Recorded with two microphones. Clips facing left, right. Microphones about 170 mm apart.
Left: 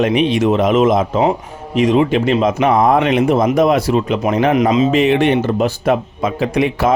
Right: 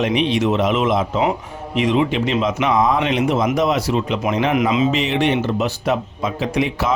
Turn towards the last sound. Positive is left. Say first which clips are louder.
# left 4 dB
turn(degrees=55)  # may be behind; listen again after turning